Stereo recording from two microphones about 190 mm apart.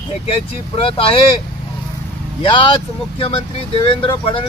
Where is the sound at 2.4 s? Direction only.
25° left (ahead or behind).